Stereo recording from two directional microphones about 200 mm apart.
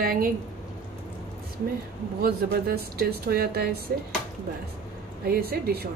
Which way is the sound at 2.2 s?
50° right (ahead or behind).